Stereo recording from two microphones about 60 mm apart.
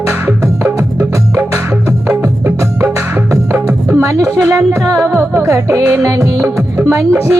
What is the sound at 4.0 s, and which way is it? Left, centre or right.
Speech, right.